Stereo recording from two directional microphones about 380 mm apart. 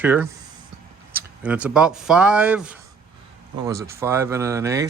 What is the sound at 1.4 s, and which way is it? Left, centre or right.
A man's voice, centre.